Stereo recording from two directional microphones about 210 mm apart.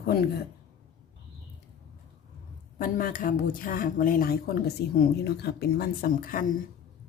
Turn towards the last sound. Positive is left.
turn(degrees=45)  # may be behind; listen again after turning